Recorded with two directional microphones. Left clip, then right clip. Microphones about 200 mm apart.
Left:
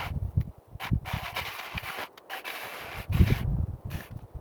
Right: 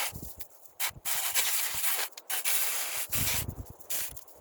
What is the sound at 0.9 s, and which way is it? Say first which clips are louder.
Rub: right 1 dB; 15° right (ahead or behind).